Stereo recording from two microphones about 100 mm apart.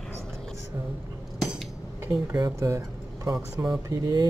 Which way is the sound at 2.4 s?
35° right (ahead or behind).